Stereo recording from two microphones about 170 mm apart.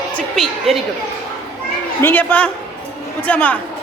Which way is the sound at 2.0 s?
10° left (ahead or behind).